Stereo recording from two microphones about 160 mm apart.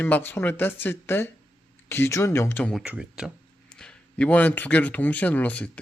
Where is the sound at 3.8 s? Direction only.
5° left (ahead or behind).